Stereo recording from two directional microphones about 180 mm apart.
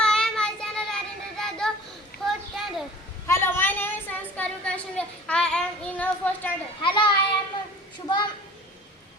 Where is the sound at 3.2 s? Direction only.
15° left (ahead or behind).